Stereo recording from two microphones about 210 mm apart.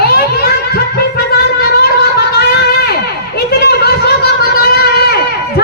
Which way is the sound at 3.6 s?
50° left (ahead or behind).